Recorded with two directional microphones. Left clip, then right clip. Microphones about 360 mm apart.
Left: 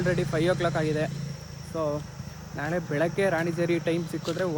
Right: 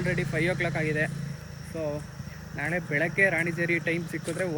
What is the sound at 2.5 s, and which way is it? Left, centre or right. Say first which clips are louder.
Speech: even; centre.